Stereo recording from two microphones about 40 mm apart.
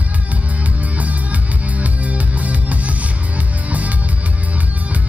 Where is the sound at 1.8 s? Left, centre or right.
Right.